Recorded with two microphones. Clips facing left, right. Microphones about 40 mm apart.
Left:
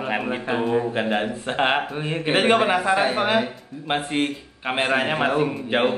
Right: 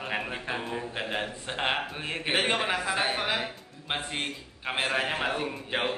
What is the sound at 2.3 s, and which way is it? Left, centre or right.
Speech, left.